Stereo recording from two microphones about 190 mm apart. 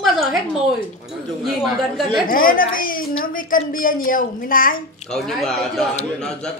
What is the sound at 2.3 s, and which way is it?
A woman's voice, 50° left (ahead or behind).